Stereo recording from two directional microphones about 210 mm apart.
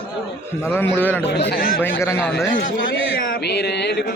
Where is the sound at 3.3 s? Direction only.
50° left (ahead or behind).